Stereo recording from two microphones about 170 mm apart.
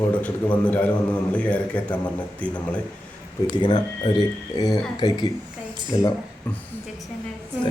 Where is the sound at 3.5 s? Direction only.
30° left (ahead or behind).